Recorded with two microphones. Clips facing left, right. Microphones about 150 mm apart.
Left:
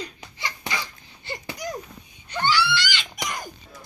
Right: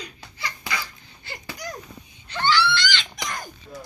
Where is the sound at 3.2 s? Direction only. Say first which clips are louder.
Left 4 dB; 10° left (ahead or behind).